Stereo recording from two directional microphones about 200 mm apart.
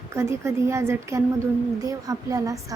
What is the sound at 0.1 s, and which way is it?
A woman's voice, 15° right (ahead or behind).